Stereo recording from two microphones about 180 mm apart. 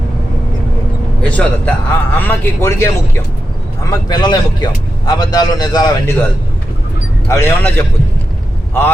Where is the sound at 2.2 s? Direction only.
10° left (ahead or behind).